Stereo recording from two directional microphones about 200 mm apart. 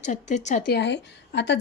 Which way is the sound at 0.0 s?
35° left (ahead or behind).